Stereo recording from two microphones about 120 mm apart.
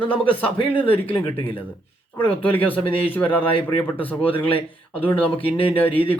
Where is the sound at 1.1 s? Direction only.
45° left (ahead or behind).